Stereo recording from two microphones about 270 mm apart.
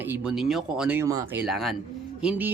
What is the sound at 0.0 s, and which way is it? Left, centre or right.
Speech, centre.